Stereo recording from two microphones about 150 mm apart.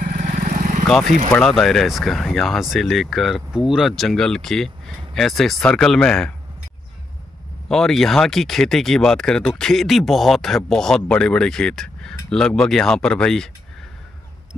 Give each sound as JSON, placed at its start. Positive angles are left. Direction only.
{"t": 0.2, "sound": "vehicle", "side_deg": -55}
{"t": 1.3, "sound": "speech", "side_deg": 0}
{"t": 7.6, "sound": "speech", "side_deg": 0}